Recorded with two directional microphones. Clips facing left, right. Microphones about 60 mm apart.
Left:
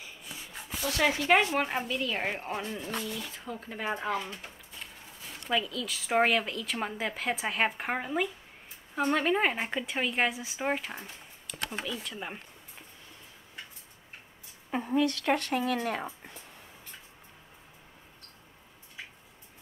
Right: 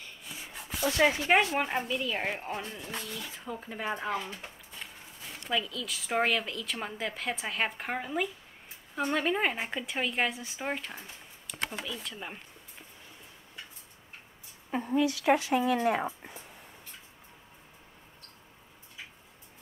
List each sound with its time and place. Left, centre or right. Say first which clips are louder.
0.8 s speech: right 1 dB; centre
1.5 s speech: even; centre
5.5 s speech: left 2 dB; centre
14.7 s a woman's voice: even; centre
15.0 s speech: right 2 dB; centre